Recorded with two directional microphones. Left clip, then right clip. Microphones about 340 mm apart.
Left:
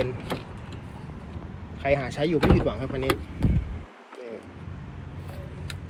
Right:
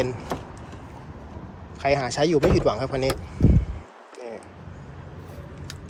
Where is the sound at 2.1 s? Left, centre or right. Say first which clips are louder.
Right 3 dB; centre.